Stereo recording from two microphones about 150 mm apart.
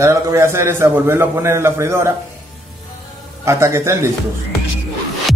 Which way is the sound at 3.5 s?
20° right (ahead or behind).